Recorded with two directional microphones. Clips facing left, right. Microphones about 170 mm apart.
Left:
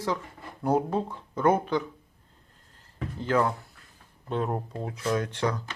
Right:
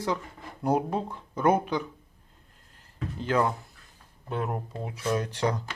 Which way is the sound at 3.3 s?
15° right (ahead or behind).